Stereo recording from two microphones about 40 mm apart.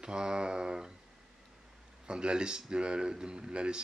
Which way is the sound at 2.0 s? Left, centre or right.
Right.